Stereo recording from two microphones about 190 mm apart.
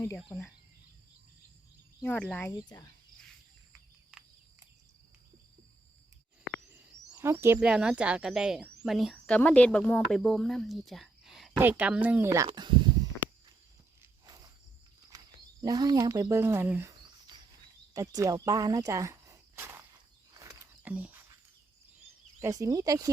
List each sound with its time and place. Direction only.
0.2 s speech: centre (ahead or behind)
2.0 s speech: 10° left (ahead or behind)
2.5 s speech: 15° left (ahead or behind)
6.4 s bird: centre (ahead or behind)
7.1 s speech: 15° right (ahead or behind)
12.5 s speech: 25° right (ahead or behind)
14.0 s walk: 20° right (ahead or behind)
15.1 s speech: 20° right (ahead or behind)
17.9 s speech: 20° right (ahead or behind)
20.3 s a sound: 15° right (ahead or behind)
22.4 s speech: 15° right (ahead or behind)